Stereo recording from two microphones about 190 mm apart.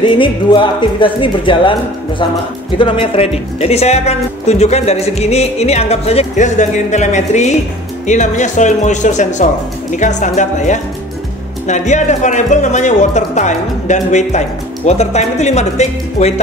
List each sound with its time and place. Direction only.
0.0 s speech: 25° left (ahead or behind)